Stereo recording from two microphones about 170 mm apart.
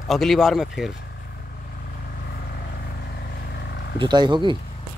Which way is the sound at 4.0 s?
25° right (ahead or behind).